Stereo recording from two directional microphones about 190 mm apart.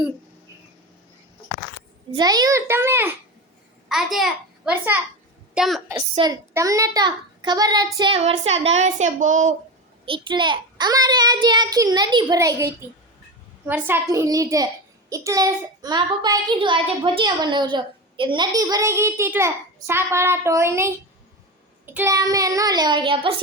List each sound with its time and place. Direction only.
2.1 s a child's voice: 20° right (ahead or behind)
3.8 s a child's voice: centre (ahead or behind)
6.1 s a child's voice: 20° right (ahead or behind); by 9.6 s 40° right (ahead or behind)
10.1 s a child's voice: 25° right (ahead or behind)